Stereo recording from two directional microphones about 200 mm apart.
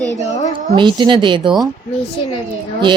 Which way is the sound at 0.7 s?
25° right (ahead or behind).